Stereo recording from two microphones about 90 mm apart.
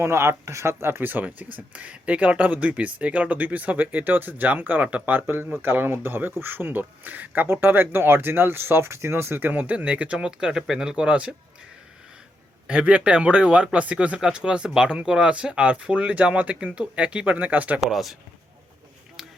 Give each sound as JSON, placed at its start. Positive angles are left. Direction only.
{"t": 0.0, "sound": "speech", "side_deg": -30}
{"t": 12.6, "sound": "speech", "side_deg": -10}
{"t": 17.7, "sound": "speech", "side_deg": -5}